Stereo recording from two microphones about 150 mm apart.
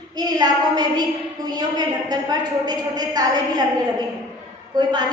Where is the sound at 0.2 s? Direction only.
25° right (ahead or behind).